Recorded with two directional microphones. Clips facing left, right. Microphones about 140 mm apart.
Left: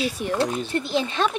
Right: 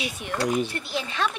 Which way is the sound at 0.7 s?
25° left (ahead or behind).